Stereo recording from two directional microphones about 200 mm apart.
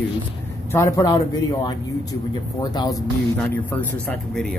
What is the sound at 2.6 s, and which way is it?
Speech, 20° left (ahead or behind).